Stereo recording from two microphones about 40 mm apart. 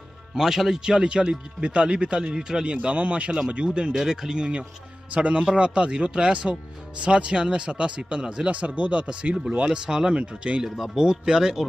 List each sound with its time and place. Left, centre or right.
0.3 s speech: centre
1.6 s speech: right
2.3 s speech: centre
2.6 s speech: right
3.9 s speech: centre
5.1 s speech: right; by 8.5 s centre
8.5 s speech: right
10.6 s speech: centre